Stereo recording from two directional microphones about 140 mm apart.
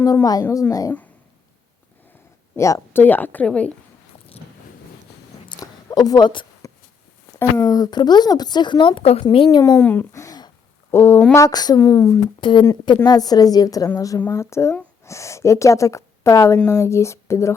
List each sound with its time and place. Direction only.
0.0 s a woman's voice: 25° left (ahead or behind)
2.6 s a woman's voice: 20° left (ahead or behind)
5.5 s a sound: 30° left (ahead or behind)
7.3 s speech: 20° left (ahead or behind)
9.7 s a woman's voice: 15° left (ahead or behind)
12.4 s a woman's voice: 35° left (ahead or behind)